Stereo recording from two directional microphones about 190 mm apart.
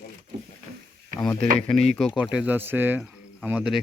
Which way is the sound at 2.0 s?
Centre (ahead or behind).